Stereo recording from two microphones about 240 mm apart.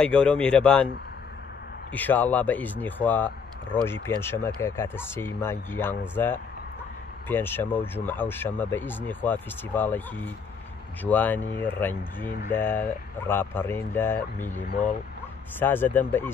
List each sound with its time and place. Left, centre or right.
0.0 s a man's voice: centre
1.9 s speech: centre
14.7 s speech: left
15.6 s speech: centre